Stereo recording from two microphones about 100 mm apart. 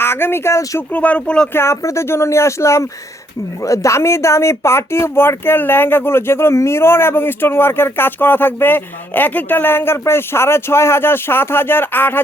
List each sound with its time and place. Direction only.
0.0 s speech: 25° left (ahead or behind)
0.9 s speech: 15° left (ahead or behind)
1.5 s speech: 25° left (ahead or behind)